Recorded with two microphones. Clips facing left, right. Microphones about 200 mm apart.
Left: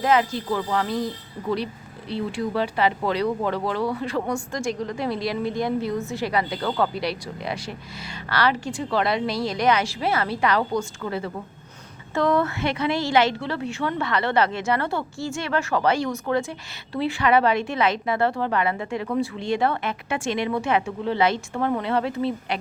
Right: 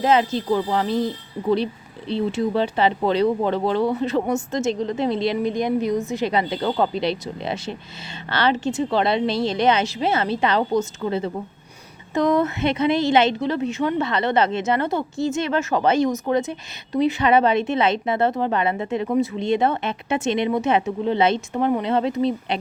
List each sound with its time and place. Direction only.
0.0 s a woman's voice: 25° right (ahead or behind)